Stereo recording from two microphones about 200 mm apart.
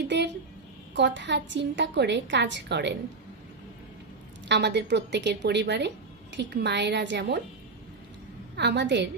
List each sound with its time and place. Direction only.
0.1 s a sound: 60° right (ahead or behind)
0.9 s speech: 60° right (ahead or behind)
4.5 s speech: 60° right (ahead or behind)
8.5 s speech: 60° right (ahead or behind)